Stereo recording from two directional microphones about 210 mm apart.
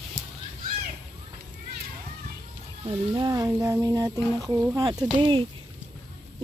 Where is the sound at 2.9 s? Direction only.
20° right (ahead or behind).